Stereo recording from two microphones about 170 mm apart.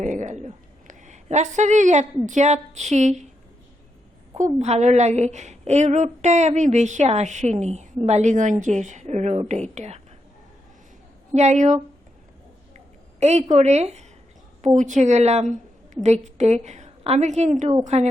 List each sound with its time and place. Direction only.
0.0 s a sound: 45° right (ahead or behind)
4.5 s a woman's voice: 40° right (ahead or behind)
11.3 s a woman's voice: 45° right (ahead or behind)
13.1 s a woman's voice: 40° right (ahead or behind)